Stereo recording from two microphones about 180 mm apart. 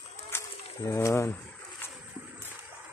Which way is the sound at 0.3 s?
15° left (ahead or behind).